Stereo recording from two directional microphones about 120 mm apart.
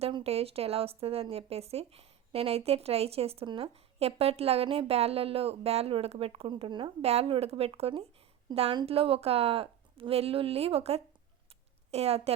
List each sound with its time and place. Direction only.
0.1 s speech: 55° right (ahead or behind)
7.0 s a woman's voice: 60° right (ahead or behind)